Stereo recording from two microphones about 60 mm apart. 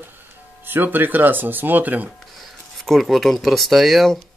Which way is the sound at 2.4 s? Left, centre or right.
Centre.